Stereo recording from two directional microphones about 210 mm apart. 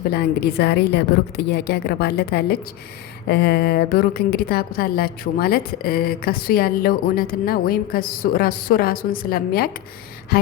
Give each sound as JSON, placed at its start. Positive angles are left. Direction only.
{"t": 0.1, "sound": "a woman's voice", "side_deg": 50}